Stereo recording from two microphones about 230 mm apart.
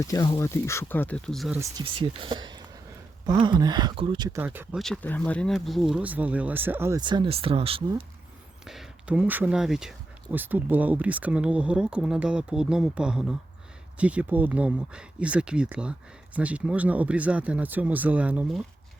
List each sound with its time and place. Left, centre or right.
0.0 s speech: centre
1.8 s speech: right
8.6 s speech: centre